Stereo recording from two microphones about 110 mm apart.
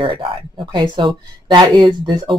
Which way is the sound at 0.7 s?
45° right (ahead or behind).